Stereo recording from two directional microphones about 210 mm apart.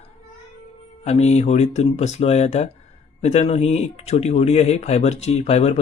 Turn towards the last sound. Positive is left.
turn(degrees=30)  # may be behind; listen again after turning